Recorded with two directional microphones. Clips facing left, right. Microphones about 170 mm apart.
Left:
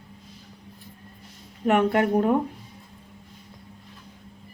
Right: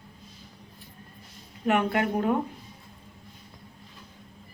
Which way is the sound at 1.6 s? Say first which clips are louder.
Left 4 dB; 40° left (ahead or behind).